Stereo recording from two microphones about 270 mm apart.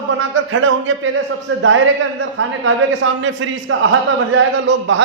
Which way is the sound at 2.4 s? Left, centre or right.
Right.